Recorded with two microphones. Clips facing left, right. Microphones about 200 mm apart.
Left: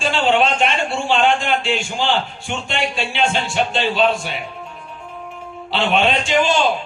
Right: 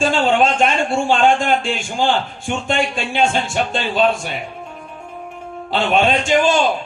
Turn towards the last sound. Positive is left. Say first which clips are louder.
# right 2 dB
turn(degrees=-45)  # may be behind; listen again after turning